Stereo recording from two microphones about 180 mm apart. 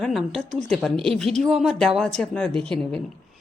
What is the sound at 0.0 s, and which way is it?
A woman's voice, centre (ahead or behind).